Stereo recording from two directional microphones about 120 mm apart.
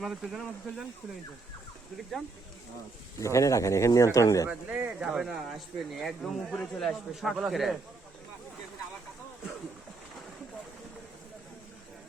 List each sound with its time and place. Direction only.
0.0 s speech: 5° right (ahead or behind)
3.2 s speech: 25° left (ahead or behind)
4.4 s speech: 15° right (ahead or behind)